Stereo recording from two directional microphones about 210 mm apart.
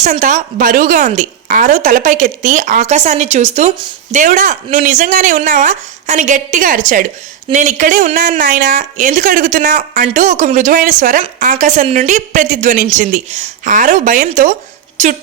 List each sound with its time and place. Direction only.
0.0 s a woman's voice: 35° right (ahead or behind)